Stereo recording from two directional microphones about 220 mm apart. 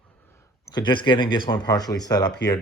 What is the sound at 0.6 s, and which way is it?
Speech, 20° left (ahead or behind).